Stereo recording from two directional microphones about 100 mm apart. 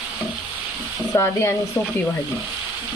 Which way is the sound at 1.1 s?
25° left (ahead or behind).